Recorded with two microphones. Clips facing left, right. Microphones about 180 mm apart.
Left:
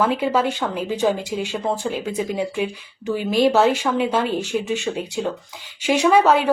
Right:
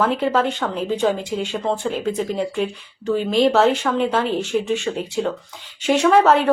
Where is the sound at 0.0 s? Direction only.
5° left (ahead or behind).